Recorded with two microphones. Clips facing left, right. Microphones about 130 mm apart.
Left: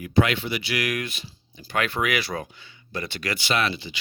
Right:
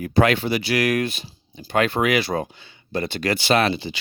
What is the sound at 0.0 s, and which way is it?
Speech, 40° right (ahead or behind).